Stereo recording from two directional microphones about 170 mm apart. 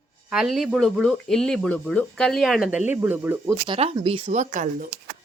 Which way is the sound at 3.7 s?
35° right (ahead or behind).